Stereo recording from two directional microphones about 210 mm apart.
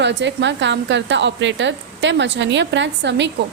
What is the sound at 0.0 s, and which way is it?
A woman's voice, 55° right (ahead or behind).